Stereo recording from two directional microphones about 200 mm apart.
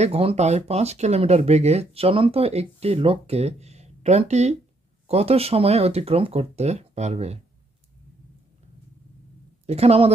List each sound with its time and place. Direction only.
0.0 s speech: 30° right (ahead or behind)
9.7 s speech: 30° right (ahead or behind)